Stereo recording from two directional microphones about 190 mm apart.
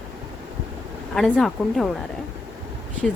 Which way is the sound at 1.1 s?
Centre (ahead or behind).